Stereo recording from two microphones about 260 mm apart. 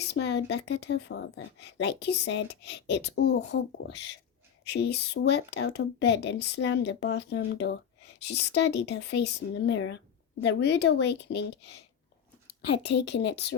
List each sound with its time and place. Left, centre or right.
0.1 s speech: left